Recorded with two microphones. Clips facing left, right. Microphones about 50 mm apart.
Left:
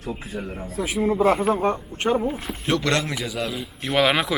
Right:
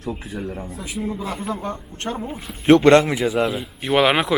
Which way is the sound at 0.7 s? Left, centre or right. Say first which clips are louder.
Left 6 dB; left.